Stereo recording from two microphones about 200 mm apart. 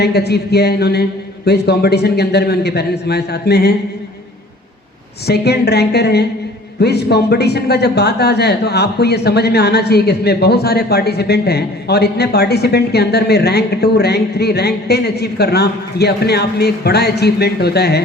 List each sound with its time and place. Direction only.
0.0 s speech: 55° left (ahead or behind)
5.3 s speech: 55° left (ahead or behind)